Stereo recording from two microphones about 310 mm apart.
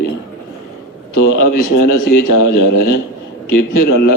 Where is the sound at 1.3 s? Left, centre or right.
Left.